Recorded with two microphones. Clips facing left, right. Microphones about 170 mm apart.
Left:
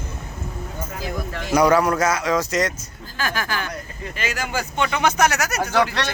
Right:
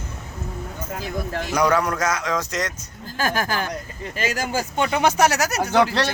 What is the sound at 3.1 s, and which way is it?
Speech, 45° right (ahead or behind).